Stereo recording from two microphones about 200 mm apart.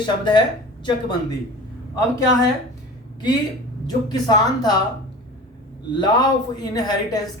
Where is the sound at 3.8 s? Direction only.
20° left (ahead or behind).